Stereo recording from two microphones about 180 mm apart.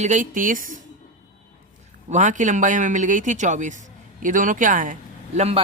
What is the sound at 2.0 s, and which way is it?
Speech, 40° right (ahead or behind).